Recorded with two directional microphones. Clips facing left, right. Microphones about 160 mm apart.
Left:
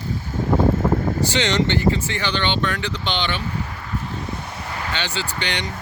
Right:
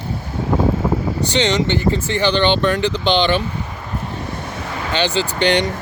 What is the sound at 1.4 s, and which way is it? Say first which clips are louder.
Speech: right 5 dB; 20° right (ahead or behind).